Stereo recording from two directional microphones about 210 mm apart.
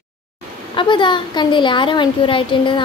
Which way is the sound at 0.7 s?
25° left (ahead or behind).